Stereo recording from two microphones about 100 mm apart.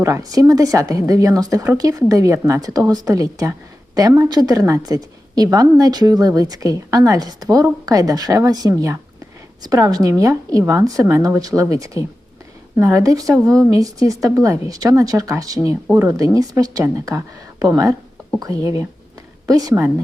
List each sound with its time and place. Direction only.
0.0 s a woman's voice: 35° right (ahead or behind)